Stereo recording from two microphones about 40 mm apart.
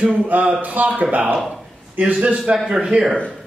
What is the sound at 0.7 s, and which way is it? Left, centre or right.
A man's voice, right.